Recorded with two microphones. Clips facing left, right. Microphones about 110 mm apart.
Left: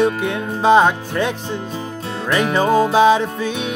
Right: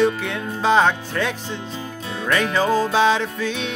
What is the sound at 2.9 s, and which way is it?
Music, 15° left (ahead or behind).